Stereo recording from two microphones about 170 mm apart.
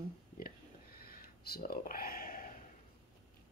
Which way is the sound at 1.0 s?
65° left (ahead or behind).